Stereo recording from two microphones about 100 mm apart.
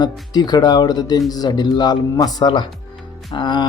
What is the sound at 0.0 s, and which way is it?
Speech, 45° left (ahead or behind).